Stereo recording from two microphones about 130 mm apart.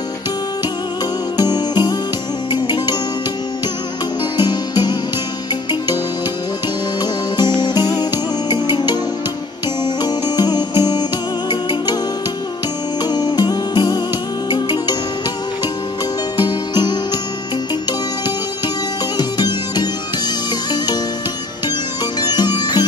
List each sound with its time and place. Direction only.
1.3 s music: 30° left (ahead or behind)
4.4 s music: 35° left (ahead or behind)
7.0 s music: 35° left (ahead or behind)
10.0 s music: 30° left (ahead or behind)
13.0 s music: 30° left (ahead or behind)
16.3 s music: 35° left (ahead or behind)
19.1 s music: 30° left (ahead or behind)
22.2 s music: 30° left (ahead or behind)